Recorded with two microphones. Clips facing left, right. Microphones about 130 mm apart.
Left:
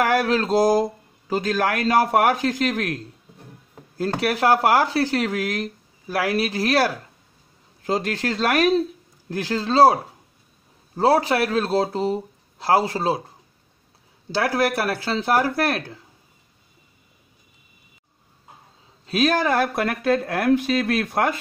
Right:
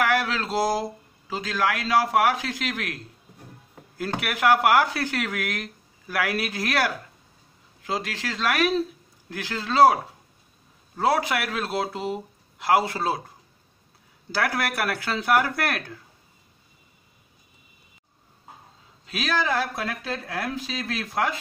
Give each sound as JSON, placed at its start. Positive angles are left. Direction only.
{"t": 0.0, "sound": "speech", "side_deg": 45}
{"t": 4.2, "sound": "speech", "side_deg": 35}
{"t": 7.8, "sound": "speech", "side_deg": 45}
{"t": 11.0, "sound": "speech", "side_deg": 35}
{"t": 14.3, "sound": "speech", "side_deg": 30}
{"t": 19.0, "sound": "speech", "side_deg": 45}